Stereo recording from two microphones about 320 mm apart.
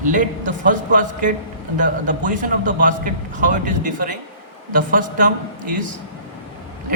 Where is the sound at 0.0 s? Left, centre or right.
Right.